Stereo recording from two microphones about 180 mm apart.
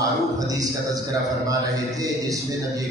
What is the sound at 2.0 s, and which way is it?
Speech, 20° right (ahead or behind).